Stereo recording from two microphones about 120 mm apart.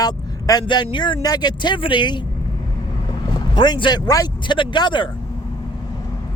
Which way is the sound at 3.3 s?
40° left (ahead or behind).